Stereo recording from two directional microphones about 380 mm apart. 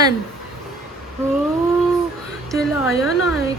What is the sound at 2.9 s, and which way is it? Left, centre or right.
Speech, left.